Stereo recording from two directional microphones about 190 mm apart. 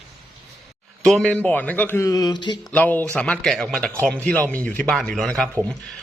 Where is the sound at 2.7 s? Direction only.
10° left (ahead or behind).